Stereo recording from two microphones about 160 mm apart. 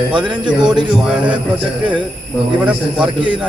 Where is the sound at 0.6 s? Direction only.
30° right (ahead or behind).